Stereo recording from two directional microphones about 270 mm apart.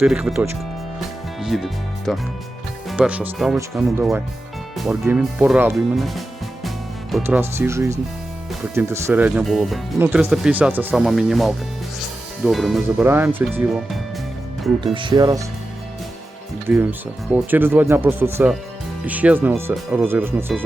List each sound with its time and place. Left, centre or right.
0.0 s speech: centre
0.9 s music: centre
2.9 s speech: centre
14.9 s speech: centre
16.6 s speech: centre